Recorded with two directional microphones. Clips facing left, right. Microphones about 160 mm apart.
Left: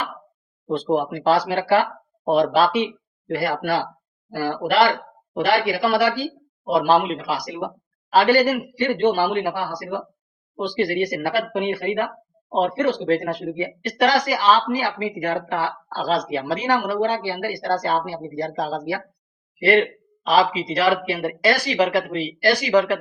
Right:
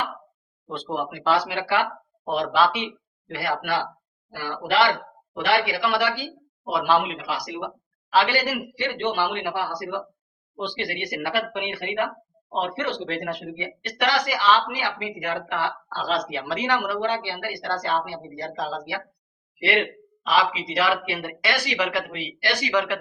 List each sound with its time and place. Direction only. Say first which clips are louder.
0.7 s a man's voice: left 8 dB; 40° left (ahead or behind)
20.2 s speech: left 4 dB; 40° left (ahead or behind)